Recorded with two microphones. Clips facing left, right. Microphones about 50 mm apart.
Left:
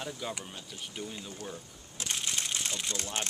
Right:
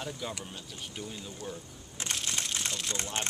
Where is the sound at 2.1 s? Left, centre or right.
Centre.